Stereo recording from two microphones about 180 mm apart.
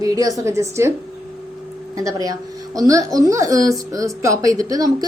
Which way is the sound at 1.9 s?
20° right (ahead or behind).